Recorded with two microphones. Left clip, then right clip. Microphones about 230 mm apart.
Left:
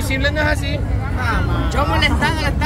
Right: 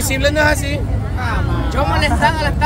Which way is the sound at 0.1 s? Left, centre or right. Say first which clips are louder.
Right 4 dB; right.